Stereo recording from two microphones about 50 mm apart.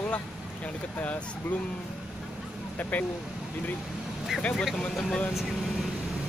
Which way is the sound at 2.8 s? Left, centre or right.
Left.